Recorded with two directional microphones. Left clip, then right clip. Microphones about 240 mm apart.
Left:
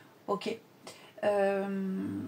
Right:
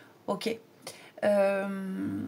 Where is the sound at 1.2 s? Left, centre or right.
Right.